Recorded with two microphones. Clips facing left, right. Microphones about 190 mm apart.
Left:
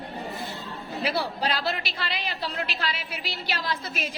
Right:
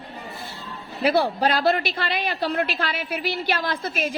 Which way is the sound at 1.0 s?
55° right (ahead or behind).